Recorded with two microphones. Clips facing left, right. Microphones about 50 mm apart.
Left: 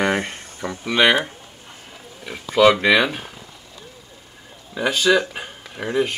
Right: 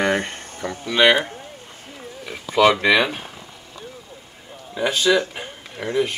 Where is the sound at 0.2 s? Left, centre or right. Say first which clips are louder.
Even; right.